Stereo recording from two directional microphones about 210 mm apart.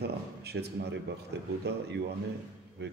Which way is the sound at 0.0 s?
50° right (ahead or behind).